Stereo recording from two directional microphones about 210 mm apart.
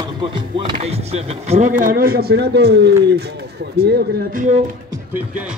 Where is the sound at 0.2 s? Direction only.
25° right (ahead or behind).